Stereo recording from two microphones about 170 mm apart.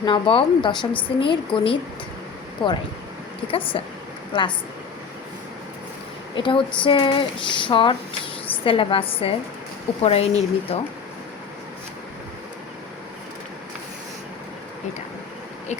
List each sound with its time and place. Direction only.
0.0 s a woman's voice: 30° left (ahead or behind)
6.3 s a woman's voice: 30° left (ahead or behind)